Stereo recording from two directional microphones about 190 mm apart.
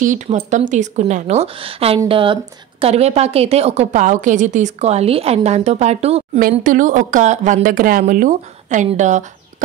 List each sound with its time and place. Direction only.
0.0 s a woman's voice: 40° right (ahead or behind)
6.6 s a woman's voice: 45° right (ahead or behind)